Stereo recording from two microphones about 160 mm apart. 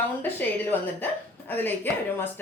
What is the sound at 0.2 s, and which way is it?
A woman's voice, 10° left (ahead or behind).